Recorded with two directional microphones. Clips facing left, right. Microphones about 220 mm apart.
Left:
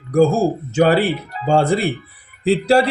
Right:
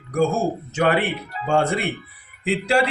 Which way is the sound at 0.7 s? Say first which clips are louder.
Left 5 dB; 30° left (ahead or behind).